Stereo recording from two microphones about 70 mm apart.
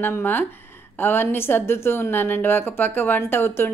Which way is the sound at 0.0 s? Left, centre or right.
Left.